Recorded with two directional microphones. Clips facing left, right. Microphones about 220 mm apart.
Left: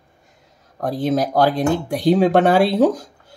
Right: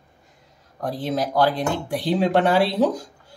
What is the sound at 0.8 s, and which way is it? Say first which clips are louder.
Speech: left 5 dB; 45° left (ahead or behind).